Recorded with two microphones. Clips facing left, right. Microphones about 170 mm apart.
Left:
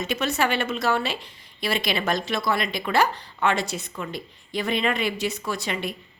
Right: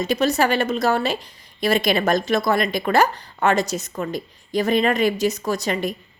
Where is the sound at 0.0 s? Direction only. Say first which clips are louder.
Right 5 dB; 35° right (ahead or behind).